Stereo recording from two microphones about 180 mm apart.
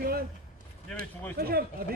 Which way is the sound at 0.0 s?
55° right (ahead or behind).